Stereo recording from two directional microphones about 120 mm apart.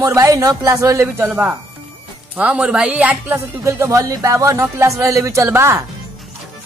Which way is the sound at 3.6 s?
25° right (ahead or behind).